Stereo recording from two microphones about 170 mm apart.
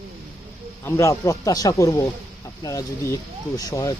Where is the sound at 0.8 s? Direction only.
15° left (ahead or behind).